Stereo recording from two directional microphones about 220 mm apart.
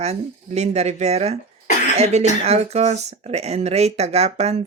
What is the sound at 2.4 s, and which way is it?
Speech, 30° right (ahead or behind).